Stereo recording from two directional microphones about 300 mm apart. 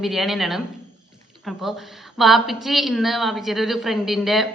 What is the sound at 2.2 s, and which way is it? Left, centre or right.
A woman's voice, centre.